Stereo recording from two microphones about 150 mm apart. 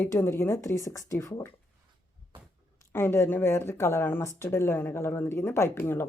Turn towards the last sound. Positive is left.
turn(degrees=15)  # may be behind; listen again after turning